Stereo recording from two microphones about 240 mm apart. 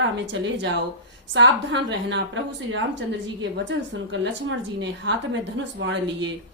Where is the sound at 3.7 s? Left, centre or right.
Right.